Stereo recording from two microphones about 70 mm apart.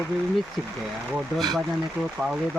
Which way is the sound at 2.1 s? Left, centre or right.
Centre.